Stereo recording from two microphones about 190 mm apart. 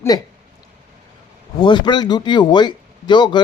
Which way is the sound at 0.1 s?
20° left (ahead or behind).